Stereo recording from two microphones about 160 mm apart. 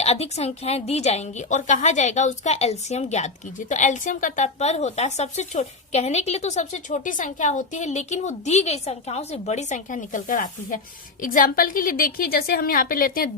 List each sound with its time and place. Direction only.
0.0 s a woman's voice: 40° left (ahead or behind); by 13.3 s 60° left (ahead or behind)